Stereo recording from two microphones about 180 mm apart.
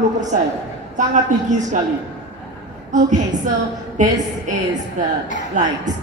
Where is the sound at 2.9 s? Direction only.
45° right (ahead or behind).